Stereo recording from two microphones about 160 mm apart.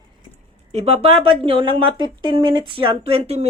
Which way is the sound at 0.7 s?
40° right (ahead or behind).